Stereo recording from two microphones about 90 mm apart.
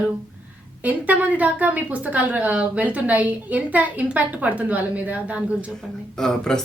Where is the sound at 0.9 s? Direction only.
15° right (ahead or behind).